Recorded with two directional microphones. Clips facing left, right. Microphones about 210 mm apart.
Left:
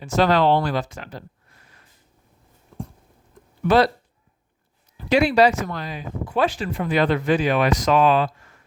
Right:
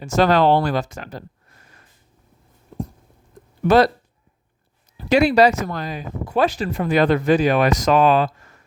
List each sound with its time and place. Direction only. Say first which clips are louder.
0.0 s speech: right 2 dB; 45° right (ahead or behind)
3.6 s speech: right 3 dB; 45° right (ahead or behind)
4.9 s speech: right 2 dB; 40° right (ahead or behind)